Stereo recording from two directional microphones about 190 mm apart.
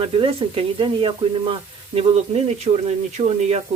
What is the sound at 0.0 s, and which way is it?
Speech, 30° right (ahead or behind).